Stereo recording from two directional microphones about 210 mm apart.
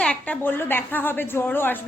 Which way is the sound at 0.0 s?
5° left (ahead or behind).